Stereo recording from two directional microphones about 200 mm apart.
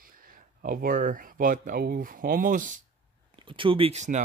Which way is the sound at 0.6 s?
45° right (ahead or behind).